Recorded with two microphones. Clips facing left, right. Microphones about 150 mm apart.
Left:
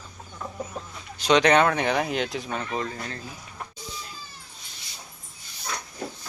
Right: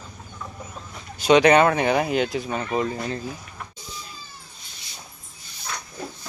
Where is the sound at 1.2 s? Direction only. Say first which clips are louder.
Right 4 dB; 5° right (ahead or behind).